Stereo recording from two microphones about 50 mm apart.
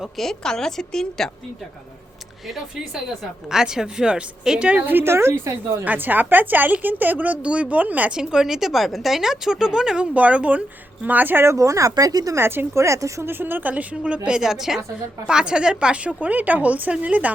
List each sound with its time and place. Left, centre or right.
0.2 s a woman's voice: centre
3.5 s speech: centre
4.9 s a woman's voice: right
5.1 s a woman's voice: right
5.8 s speech: right
8.1 s speech: centre
10.2 s speech: right
11.0 s speech: right
11.4 s speech: right
12.4 s a woman's voice: right
12.7 s speech: right
13.2 s speech: right
13.9 s speech: right